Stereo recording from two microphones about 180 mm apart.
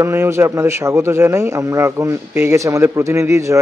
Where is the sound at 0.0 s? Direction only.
15° right (ahead or behind).